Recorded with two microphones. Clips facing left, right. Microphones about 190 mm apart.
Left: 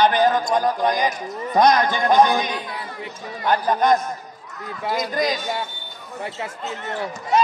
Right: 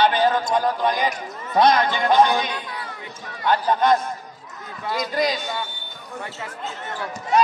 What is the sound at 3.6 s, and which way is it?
Speech, 45° left (ahead or behind).